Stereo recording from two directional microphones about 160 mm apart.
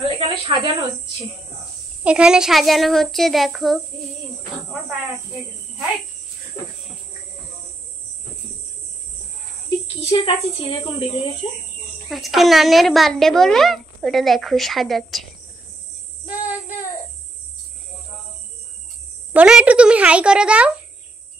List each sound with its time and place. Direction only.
0.2 s speech: 30° right (ahead or behind)
2.0 s speech: 5° right (ahead or behind)
10.0 s a woman's voice: 35° left (ahead or behind)
12.1 s speech: centre (ahead or behind)
16.3 s child singing: 60° left (ahead or behind)
19.3 s a child's voice: 5° right (ahead or behind)